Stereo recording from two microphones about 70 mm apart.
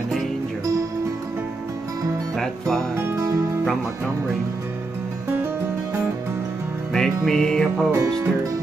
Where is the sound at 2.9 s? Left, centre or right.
Right.